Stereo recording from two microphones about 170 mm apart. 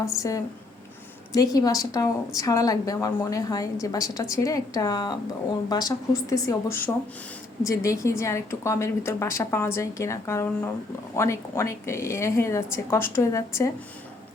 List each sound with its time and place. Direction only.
0.0 s a woman's voice: 20° left (ahead or behind)
1.5 s a woman's voice: 20° left (ahead or behind)